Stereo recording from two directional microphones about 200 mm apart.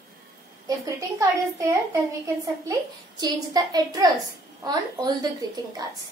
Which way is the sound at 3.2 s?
20° right (ahead or behind).